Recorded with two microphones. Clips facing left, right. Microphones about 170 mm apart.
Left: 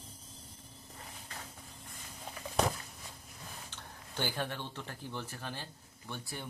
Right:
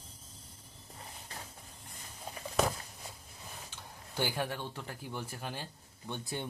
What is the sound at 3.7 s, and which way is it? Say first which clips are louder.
Speech: right 3 dB; 10° right (ahead or behind).